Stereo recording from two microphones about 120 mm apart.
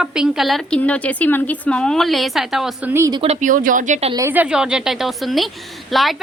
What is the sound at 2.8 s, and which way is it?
Speech, 20° right (ahead or behind).